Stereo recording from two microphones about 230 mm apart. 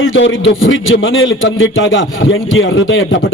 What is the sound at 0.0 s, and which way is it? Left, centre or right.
A man's voice, left.